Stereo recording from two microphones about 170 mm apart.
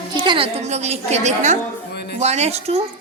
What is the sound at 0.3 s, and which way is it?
A woman's voice, 35° right (ahead or behind).